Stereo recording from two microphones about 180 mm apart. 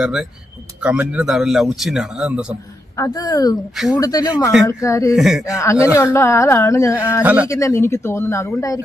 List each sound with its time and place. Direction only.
0.0 s a man's voice: 5° right (ahead or behind)
2.9 s a woman's voice: 20° left (ahead or behind)
5.1 s a man's voice: centre (ahead or behind)
5.8 s speech: 15° left (ahead or behind)
7.2 s speech: 10° right (ahead or behind)
7.4 s speech: 15° left (ahead or behind)